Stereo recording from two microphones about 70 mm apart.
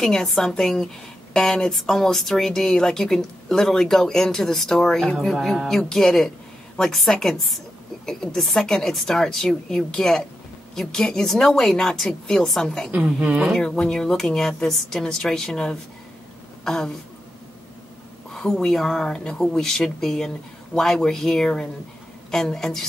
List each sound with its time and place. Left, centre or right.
0.0 s a woman's voice: centre
13.0 s speech: centre
13.6 s speech: centre
18.3 s a woman's voice: centre